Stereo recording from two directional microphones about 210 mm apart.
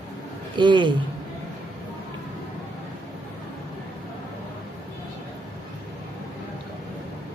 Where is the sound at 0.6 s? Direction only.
20° right (ahead or behind).